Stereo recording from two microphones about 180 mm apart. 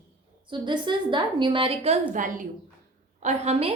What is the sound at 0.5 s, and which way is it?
A woman's voice, 25° right (ahead or behind).